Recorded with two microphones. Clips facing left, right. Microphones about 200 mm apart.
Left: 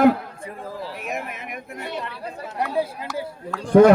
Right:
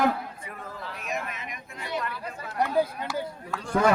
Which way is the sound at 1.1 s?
60° left (ahead or behind).